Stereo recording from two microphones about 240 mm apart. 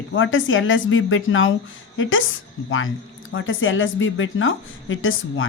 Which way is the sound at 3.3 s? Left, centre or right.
Left.